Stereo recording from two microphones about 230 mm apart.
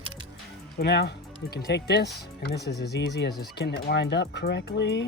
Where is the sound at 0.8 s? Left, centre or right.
Left.